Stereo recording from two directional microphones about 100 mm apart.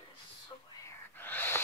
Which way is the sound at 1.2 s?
20° left (ahead or behind).